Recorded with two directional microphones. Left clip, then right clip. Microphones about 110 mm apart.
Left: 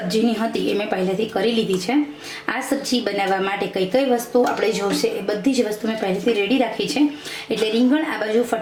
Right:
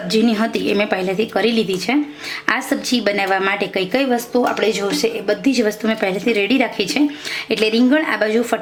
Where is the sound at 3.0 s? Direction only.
35° right (ahead or behind).